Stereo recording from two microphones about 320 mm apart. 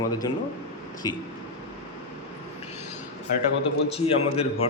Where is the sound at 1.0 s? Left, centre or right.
Centre.